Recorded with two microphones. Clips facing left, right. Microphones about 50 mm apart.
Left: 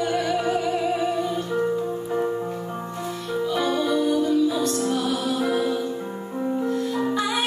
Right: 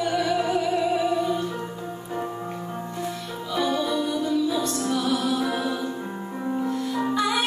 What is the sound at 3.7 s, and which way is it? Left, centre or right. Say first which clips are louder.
Music: left 4 dB; left.